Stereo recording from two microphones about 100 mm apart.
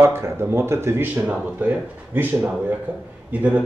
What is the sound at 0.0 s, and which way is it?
A man's voice, 25° right (ahead or behind).